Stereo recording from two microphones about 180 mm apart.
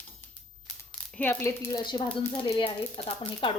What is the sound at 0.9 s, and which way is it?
A woman's voice, 10° left (ahead or behind).